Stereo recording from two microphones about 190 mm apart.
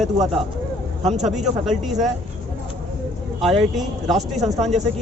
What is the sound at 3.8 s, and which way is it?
Speech, centre (ahead or behind).